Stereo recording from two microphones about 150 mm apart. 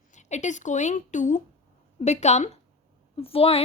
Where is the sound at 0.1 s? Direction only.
50° left (ahead or behind).